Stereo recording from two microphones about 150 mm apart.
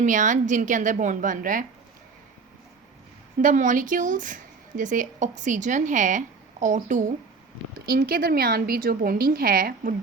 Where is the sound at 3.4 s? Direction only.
60° right (ahead or behind).